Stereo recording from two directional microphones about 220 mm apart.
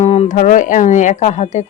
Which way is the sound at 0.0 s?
30° left (ahead or behind).